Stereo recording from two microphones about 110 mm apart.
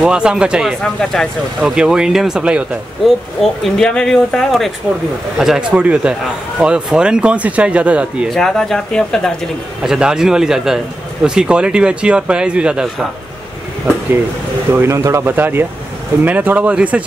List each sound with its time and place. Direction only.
0.0 s speech: 5° right (ahead or behind)
8.3 s speech: 5° left (ahead or behind)
9.8 s speech: 5° right (ahead or behind)
14.7 s speech: 25° right (ahead or behind)